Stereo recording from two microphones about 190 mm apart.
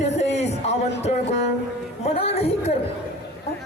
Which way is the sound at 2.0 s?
30° left (ahead or behind).